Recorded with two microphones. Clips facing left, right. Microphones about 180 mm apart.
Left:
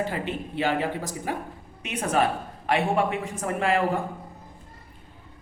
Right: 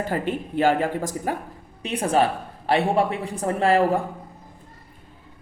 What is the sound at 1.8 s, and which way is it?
A man's voice, 30° right (ahead or behind).